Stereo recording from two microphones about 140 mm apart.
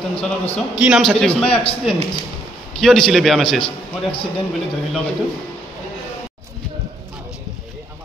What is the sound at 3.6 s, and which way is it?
Speech, 40° left (ahead or behind).